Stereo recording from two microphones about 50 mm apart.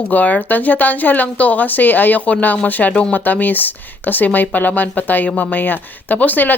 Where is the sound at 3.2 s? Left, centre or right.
Left.